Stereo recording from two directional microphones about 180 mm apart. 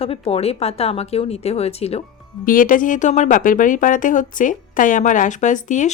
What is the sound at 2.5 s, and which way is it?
A woman's voice, 50° left (ahead or behind).